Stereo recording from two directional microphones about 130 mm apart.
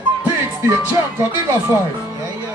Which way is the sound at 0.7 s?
20° right (ahead or behind).